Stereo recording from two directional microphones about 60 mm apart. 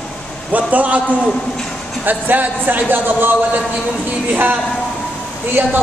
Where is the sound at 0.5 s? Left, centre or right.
Right.